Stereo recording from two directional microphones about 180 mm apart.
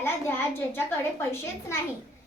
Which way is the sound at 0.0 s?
15° left (ahead or behind).